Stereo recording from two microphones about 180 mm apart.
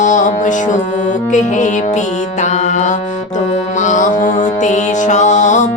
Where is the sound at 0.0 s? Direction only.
40° left (ahead or behind).